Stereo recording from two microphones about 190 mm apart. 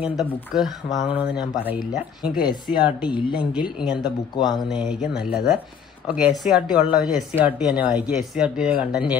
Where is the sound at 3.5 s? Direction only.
5° right (ahead or behind).